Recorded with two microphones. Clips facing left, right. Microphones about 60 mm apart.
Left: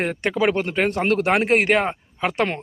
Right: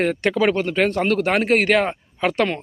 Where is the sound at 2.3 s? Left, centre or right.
Centre.